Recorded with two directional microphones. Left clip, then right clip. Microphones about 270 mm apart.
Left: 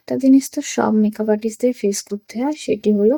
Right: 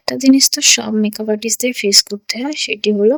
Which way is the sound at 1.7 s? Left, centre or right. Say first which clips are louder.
Right 7 dB; right.